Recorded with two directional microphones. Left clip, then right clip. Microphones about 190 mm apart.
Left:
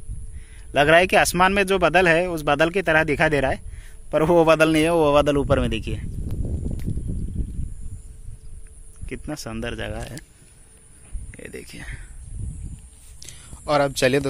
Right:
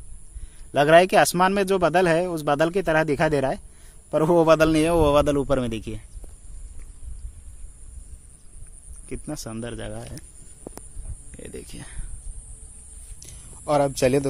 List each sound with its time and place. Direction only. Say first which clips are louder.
0.7 s a man's voice: even; 5° right (ahead or behind)
9.0 s a man's voice: left 2 dB; centre (ahead or behind)
11.3 s speech: left 2 dB; centre (ahead or behind)
13.2 s a sound: left 5 dB; 5° right (ahead or behind)
13.7 s a man's voice: left 1 dB; 10° right (ahead or behind)